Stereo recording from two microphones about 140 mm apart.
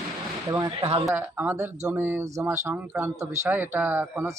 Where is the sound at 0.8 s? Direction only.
45° right (ahead or behind).